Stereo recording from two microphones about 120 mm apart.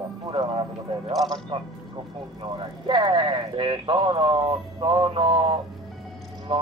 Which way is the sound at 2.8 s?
45° right (ahead or behind).